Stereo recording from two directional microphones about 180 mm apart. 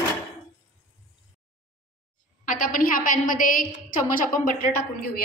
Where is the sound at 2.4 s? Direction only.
50° left (ahead or behind).